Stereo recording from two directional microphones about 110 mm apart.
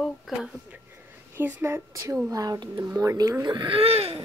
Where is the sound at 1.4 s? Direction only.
20° right (ahead or behind).